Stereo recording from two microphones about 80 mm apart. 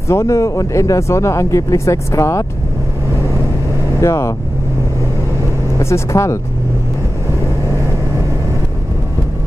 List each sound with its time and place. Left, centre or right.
0.1 s speech: left
4.0 s speech: left
5.8 s speech: left